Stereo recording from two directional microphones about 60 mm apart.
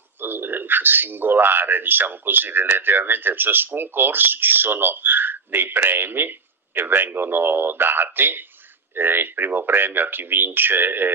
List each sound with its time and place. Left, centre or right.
0.2 s speech: right